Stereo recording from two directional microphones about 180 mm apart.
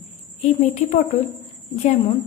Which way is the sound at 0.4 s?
40° left (ahead or behind).